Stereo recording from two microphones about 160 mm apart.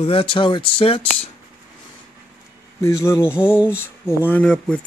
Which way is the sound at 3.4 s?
5° right (ahead or behind).